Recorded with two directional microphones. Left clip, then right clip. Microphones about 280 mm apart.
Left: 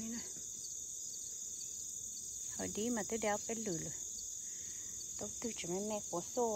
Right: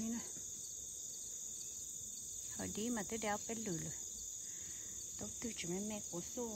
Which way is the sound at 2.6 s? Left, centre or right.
Centre.